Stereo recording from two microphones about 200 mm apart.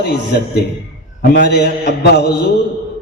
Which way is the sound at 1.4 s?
55° left (ahead or behind).